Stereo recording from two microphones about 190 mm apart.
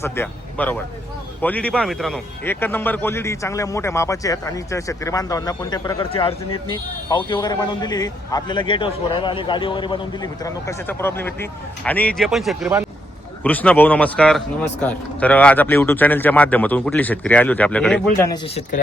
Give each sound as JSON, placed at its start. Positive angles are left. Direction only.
{"t": 0.0, "sound": "a man's voice", "side_deg": 10}
{"t": 18.4, "sound": "speech", "side_deg": 30}